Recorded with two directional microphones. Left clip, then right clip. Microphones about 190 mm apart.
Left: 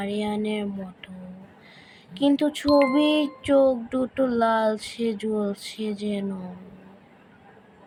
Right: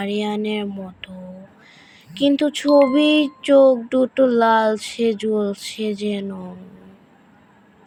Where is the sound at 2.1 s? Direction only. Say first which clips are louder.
Right 4 dB; 20° right (ahead or behind).